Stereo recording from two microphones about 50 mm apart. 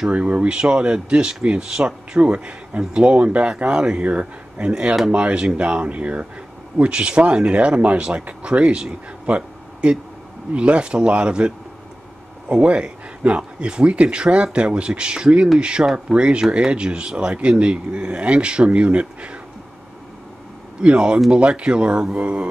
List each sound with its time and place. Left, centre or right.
0.1 s speech: right
20.8 s speech: right